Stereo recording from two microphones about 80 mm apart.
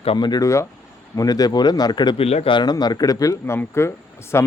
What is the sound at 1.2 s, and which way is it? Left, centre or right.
A man's voice, left.